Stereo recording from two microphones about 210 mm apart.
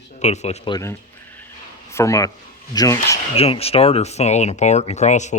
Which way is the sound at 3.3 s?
30° left (ahead or behind).